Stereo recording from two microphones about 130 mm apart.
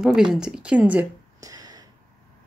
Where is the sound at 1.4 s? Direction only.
30° right (ahead or behind).